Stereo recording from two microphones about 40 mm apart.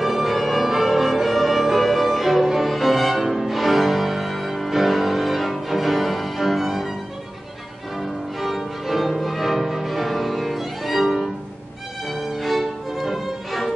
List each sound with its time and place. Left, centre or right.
0.0 s music: centre
8.0 s music: centre